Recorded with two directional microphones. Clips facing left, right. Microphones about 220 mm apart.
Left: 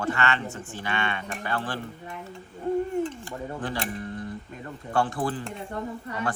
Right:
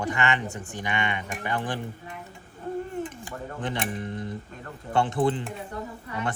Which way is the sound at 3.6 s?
20° right (ahead or behind).